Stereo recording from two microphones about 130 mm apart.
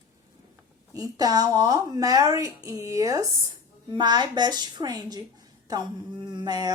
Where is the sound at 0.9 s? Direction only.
30° right (ahead or behind).